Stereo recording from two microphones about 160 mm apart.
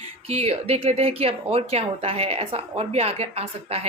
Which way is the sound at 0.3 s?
40° right (ahead or behind).